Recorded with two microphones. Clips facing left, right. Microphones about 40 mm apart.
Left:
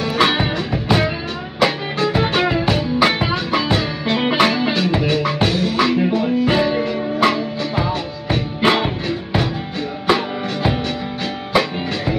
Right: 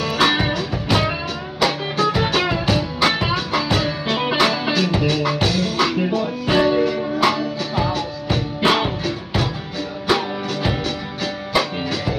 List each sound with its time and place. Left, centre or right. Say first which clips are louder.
0.2 s music: left 1 dB; left